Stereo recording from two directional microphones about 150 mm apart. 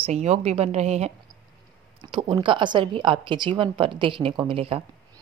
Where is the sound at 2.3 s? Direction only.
35° right (ahead or behind).